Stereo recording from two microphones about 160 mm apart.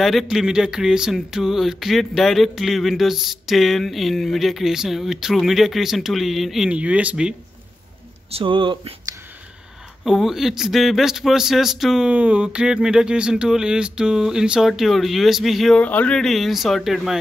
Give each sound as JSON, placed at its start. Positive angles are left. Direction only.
{"t": 0.0, "sound": "speech", "side_deg": 0}
{"t": 8.3, "sound": "speech", "side_deg": -35}
{"t": 10.0, "sound": "speech", "side_deg": 0}